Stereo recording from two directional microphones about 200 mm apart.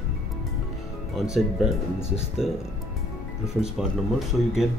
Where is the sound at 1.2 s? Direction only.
Centre (ahead or behind).